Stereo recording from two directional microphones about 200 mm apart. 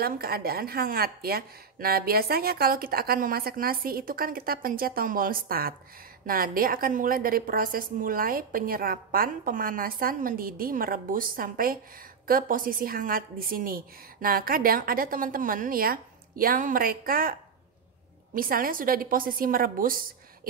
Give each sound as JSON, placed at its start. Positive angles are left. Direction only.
{"t": 0.0, "sound": "a woman's voice", "side_deg": -50}